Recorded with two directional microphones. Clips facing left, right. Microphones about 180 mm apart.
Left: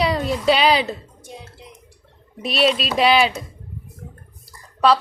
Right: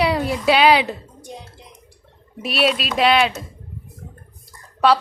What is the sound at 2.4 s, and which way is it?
Speech, 5° right (ahead or behind).